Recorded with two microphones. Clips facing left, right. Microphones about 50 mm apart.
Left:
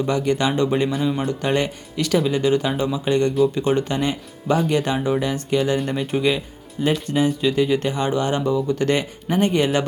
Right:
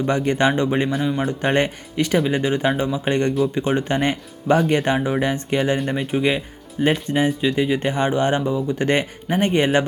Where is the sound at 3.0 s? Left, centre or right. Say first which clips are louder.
Left 3 dB; right.